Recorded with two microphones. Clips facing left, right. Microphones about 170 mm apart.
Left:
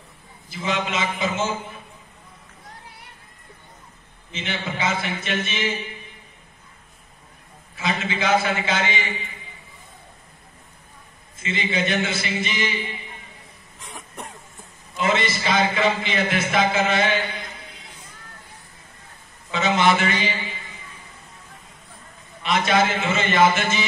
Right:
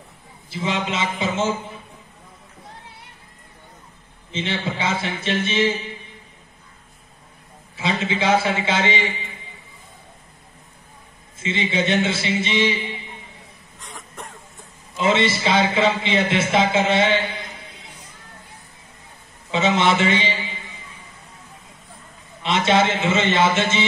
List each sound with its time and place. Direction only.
0.5 s a man's voice: 30° right (ahead or behind)
4.3 s a man's voice: 30° right (ahead or behind)
7.7 s a man's voice: 30° right (ahead or behind)
11.4 s a man's voice: 25° right (ahead or behind)
15.0 s a man's voice: 25° right (ahead or behind)
19.5 s a man's voice: 25° right (ahead or behind)
22.4 s a man's voice: 25° right (ahead or behind)